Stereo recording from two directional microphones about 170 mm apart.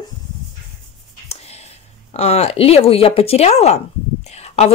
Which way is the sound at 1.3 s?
40° left (ahead or behind).